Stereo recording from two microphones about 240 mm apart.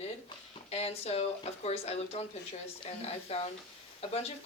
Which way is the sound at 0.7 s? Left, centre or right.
Left.